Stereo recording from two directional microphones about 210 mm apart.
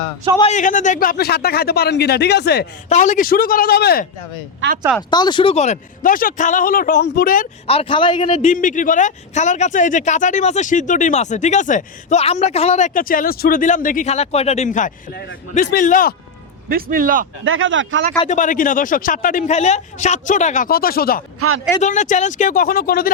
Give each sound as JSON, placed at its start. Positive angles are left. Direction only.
{"t": 0.5, "sound": "speech", "side_deg": 35}
{"t": 2.9, "sound": "speech", "side_deg": 35}
{"t": 4.9, "sound": "speech", "side_deg": 20}
{"t": 7.7, "sound": "a man's voice", "side_deg": 25}
{"t": 8.5, "sound": "speech", "side_deg": 40}
{"t": 16.6, "sound": "a man's voice", "side_deg": -45}
{"t": 17.4, "sound": "speech", "side_deg": -70}
{"t": 18.3, "sound": "speech", "side_deg": 35}